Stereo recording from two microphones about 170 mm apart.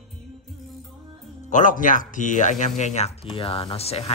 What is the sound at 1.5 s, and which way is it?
Speech, 50° left (ahead or behind).